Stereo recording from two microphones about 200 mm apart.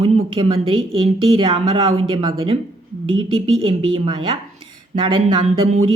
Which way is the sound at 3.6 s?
25° right (ahead or behind).